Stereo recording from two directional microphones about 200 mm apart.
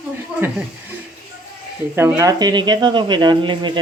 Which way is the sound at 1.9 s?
10° right (ahead or behind).